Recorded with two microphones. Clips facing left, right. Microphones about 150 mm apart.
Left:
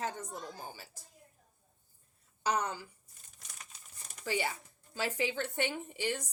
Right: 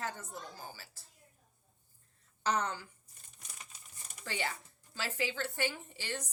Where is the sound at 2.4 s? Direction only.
10° left (ahead or behind).